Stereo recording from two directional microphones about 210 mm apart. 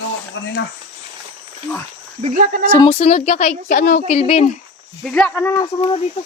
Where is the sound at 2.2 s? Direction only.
40° right (ahead or behind).